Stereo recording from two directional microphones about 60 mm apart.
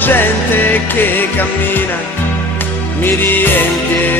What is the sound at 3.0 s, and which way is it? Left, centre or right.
Music, left.